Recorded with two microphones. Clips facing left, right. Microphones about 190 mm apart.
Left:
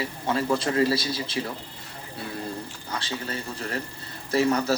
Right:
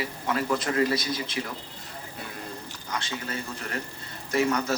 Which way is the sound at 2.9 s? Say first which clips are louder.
Even; 30° left (ahead or behind).